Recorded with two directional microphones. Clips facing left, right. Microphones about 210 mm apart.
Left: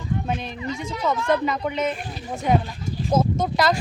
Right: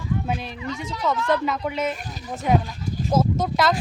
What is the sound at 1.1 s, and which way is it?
Speech, 20° left (ahead or behind).